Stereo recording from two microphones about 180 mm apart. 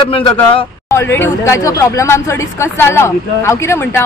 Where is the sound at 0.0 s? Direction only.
30° left (ahead or behind).